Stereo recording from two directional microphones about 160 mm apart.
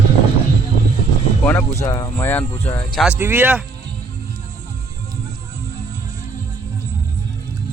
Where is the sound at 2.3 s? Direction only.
10° left (ahead or behind).